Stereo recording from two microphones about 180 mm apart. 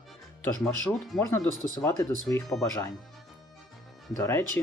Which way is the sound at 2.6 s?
20° left (ahead or behind).